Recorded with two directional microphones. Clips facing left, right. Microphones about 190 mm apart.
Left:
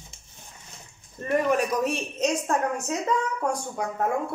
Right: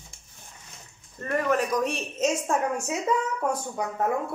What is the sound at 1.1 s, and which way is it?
Speech, 15° left (ahead or behind).